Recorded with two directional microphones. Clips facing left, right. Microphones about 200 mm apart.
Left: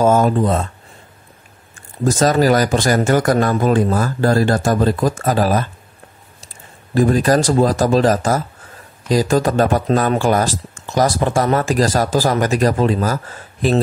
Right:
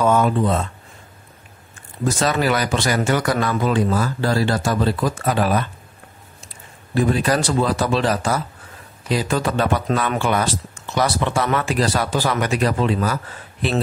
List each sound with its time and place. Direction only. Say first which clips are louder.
0.0 s speech: left 3 dB; 40° left (ahead or behind)
2.0 s speech: left 6 dB; 45° left (ahead or behind)